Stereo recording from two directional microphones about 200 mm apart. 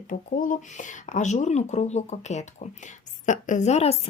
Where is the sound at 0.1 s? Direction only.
40° left (ahead or behind).